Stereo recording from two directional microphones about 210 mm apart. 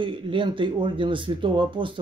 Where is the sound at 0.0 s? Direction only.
25° right (ahead or behind).